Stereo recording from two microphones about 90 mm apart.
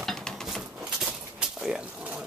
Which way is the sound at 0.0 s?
5° left (ahead or behind).